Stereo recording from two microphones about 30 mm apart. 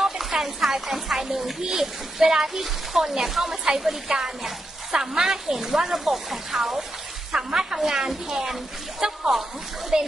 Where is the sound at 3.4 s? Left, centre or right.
Centre.